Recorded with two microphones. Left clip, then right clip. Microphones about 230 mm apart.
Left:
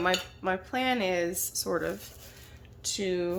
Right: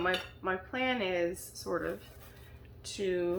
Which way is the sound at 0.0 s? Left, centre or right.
Left.